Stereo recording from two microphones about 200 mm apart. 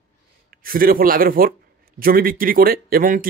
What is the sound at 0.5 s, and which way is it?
Speech, 45° right (ahead or behind).